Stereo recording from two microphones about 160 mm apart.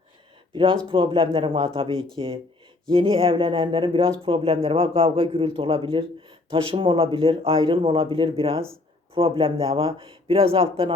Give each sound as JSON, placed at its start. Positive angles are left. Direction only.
{"t": 0.5, "sound": "a man's voice", "side_deg": -30}